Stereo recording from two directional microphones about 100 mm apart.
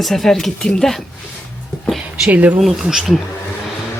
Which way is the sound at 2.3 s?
15° right (ahead or behind).